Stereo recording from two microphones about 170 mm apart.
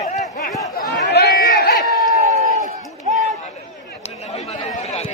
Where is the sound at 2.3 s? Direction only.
40° right (ahead or behind).